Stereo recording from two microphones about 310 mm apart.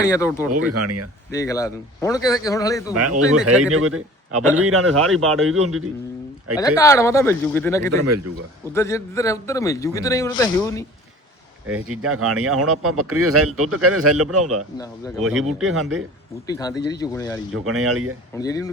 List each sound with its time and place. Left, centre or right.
0.0 s a man's voice: centre
0.5 s speech: right
1.3 s a man's voice: centre
2.9 s speech: right
3.3 s speech: centre
3.7 s a man's voice: right
6.6 s a man's voice: centre
11.7 s speech: right
15.3 s speech: centre
15.6 s a man's voice: right
16.5 s a man's voice: centre
17.5 s speech: right
18.3 s a man's voice: centre